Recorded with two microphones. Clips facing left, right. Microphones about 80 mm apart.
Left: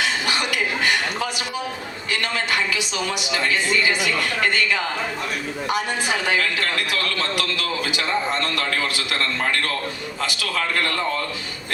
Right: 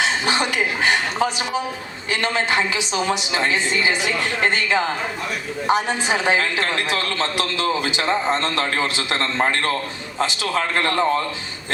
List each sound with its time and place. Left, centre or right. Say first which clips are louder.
0.0 s a woman's voice: right 3 dB; right